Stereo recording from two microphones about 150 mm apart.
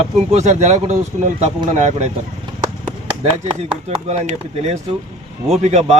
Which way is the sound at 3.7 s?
45° right (ahead or behind).